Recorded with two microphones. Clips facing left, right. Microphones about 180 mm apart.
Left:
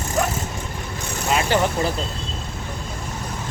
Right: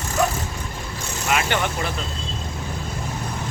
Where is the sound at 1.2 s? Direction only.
30° left (ahead or behind).